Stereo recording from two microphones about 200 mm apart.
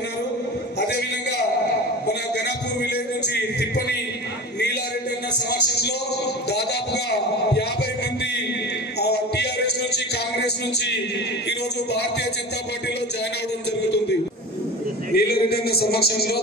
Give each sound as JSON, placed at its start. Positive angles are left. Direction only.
{"t": 2.0, "sound": "music", "side_deg": 55}
{"t": 9.0, "sound": "music", "side_deg": 55}
{"t": 15.1, "sound": "a sound", "side_deg": 50}